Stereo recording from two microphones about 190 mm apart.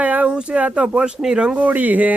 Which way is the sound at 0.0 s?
5° right (ahead or behind).